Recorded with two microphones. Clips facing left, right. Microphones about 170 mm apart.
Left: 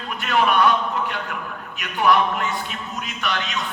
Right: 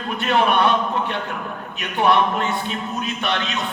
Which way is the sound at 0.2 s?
30° right (ahead or behind).